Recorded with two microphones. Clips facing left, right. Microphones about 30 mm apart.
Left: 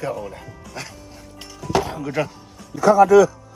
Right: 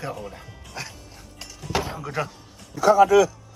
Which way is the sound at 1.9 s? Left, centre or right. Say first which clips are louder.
Left 5 dB; centre.